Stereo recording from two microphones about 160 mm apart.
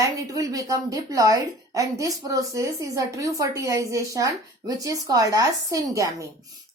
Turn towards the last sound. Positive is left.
turn(degrees=-20)  # may be behind; listen again after turning